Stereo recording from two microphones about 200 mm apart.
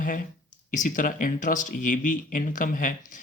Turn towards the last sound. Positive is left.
turn(degrees=40)  # may be behind; listen again after turning